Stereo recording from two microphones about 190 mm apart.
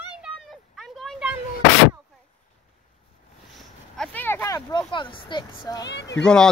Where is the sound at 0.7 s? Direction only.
Centre (ahead or behind).